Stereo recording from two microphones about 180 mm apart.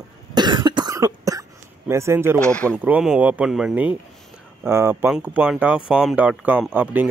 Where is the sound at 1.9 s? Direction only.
15° right (ahead or behind).